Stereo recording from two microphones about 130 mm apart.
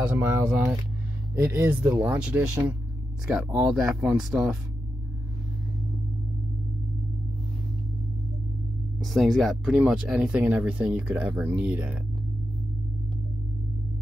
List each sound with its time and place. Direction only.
0.2 s speech: 20° right (ahead or behind)
3.5 s speech: 5° right (ahead or behind)
9.0 s speech: centre (ahead or behind)